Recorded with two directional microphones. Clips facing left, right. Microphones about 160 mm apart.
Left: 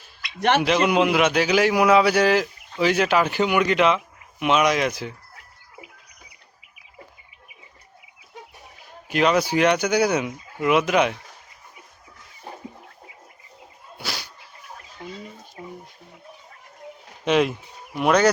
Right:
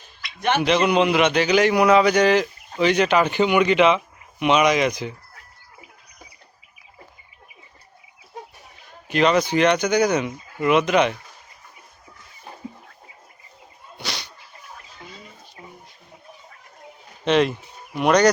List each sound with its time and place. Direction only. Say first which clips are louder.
0.3 s speech: left 2 dB; 70° left (ahead or behind)
0.6 s a man's voice: right 4 dB; 5° left (ahead or behind)
9.0 s speech: right 1 dB; 5° left (ahead or behind)
13.9 s a sound: even; 5° left (ahead or behind)
17.2 s a man's voice: right 1 dB; 5° left (ahead or behind)